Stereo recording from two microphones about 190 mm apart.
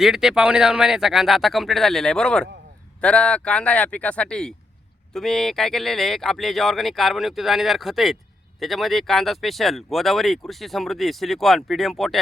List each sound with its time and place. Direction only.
0.0 s speech: centre (ahead or behind)